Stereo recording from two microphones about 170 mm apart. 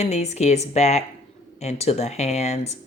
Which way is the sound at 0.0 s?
40° left (ahead or behind).